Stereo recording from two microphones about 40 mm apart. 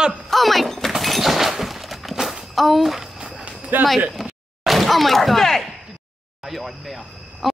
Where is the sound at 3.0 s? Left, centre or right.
Centre.